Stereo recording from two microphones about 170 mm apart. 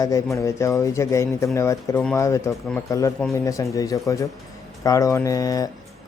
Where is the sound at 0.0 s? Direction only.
20° left (ahead or behind).